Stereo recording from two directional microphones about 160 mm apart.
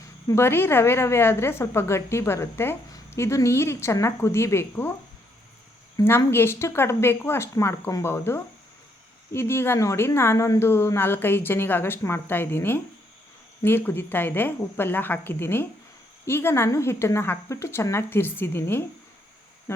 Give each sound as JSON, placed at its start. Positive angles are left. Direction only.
{"t": 0.3, "sound": "a woman's voice", "side_deg": 15}
{"t": 6.0, "sound": "a woman's voice", "side_deg": 15}